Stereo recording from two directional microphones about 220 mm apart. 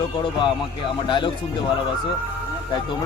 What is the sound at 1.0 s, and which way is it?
Speech, 20° left (ahead or behind).